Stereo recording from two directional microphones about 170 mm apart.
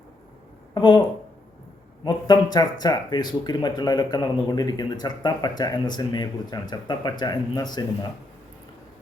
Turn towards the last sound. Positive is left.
turn(degrees=25)  # may be behind; listen again after turning